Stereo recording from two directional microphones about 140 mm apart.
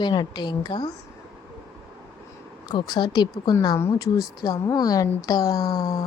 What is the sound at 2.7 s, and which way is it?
Speech, 30° left (ahead or behind).